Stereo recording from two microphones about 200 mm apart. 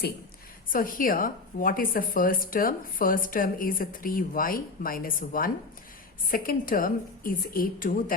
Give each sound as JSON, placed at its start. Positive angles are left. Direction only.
{"t": 0.7, "sound": "a woman's voice", "side_deg": 45}